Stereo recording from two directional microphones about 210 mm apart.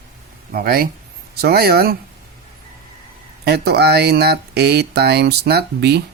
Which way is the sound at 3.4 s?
50° right (ahead or behind).